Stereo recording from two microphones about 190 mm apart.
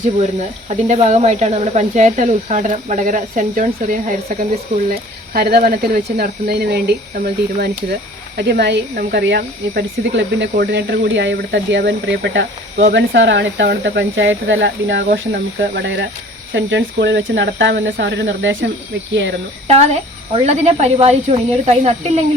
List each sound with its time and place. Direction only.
0.7 s speech: 35° right (ahead or behind); by 6.9 s 60° right (ahead or behind)
8.4 s speech: 60° right (ahead or behind)
19.6 s speech: 35° right (ahead or behind)